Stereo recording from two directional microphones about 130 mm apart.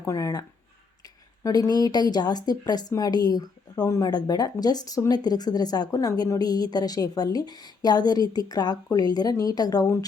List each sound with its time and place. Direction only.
0.0 s speech: 25° left (ahead or behind)
1.5 s a woman's voice: 30° left (ahead or behind)